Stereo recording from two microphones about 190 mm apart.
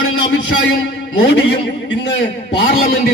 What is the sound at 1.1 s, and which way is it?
Speech, 70° left (ahead or behind).